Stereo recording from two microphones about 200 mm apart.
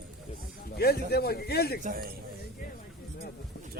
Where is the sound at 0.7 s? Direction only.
50° left (ahead or behind).